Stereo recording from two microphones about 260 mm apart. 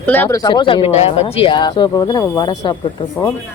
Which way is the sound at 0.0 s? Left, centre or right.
Centre.